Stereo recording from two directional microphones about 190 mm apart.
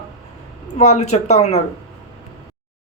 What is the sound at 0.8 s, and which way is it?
Speech, 35° left (ahead or behind).